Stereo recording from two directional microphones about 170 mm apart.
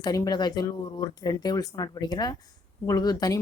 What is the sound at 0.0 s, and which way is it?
Speech, 25° left (ahead or behind).